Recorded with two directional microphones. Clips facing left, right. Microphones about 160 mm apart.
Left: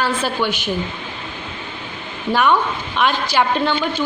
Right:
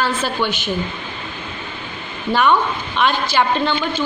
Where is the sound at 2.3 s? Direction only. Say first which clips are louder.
Right 1 dB; 5° left (ahead or behind).